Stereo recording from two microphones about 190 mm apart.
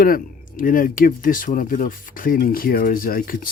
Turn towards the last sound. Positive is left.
turn(degrees=50)  # may be behind; listen again after turning